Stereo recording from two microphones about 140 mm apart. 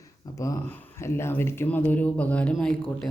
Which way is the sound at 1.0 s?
20° left (ahead or behind).